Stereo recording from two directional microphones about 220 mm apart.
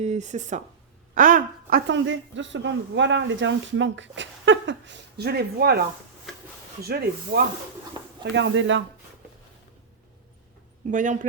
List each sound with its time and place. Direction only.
0.0 s speech: 30° right (ahead or behind)
1.9 s speech: 55° right (ahead or behind)
6.8 s speech: 45° right (ahead or behind)
8.2 s speech: 55° right (ahead or behind)
10.9 s speech: 35° right (ahead or behind)